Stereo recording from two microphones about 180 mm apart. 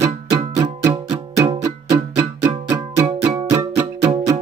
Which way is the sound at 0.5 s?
20° right (ahead or behind).